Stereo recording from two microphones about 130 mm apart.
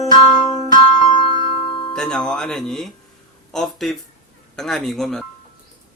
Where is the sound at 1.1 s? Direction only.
40° left (ahead or behind).